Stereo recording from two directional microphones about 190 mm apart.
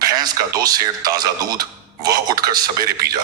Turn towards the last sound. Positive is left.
turn(degrees=-20)  # may be behind; listen again after turning